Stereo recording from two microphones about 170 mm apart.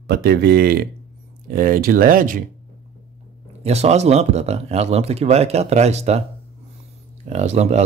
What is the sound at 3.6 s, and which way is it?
Speech, 40° right (ahead or behind).